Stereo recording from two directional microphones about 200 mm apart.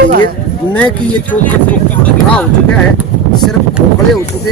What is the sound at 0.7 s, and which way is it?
Speech, 5° left (ahead or behind).